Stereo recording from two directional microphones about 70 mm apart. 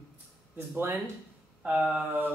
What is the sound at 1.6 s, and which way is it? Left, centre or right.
Speech, centre.